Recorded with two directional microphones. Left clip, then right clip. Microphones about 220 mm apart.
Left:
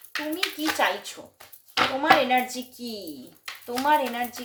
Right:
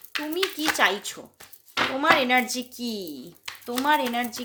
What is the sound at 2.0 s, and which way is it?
A woman's voice, 45° right (ahead or behind).